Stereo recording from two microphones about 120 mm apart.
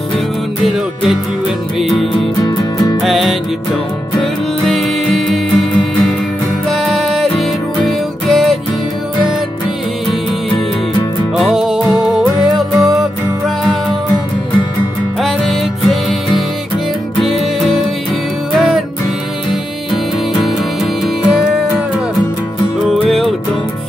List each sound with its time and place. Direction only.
0.7 s music: centre (ahead or behind)
2.1 s music: 35° left (ahead or behind)
3.0 s music: centre (ahead or behind)
11.3 s music: centre (ahead or behind)
15.1 s music: centre (ahead or behind)
19.9 s music: centre (ahead or behind)
22.8 s music: centre (ahead or behind)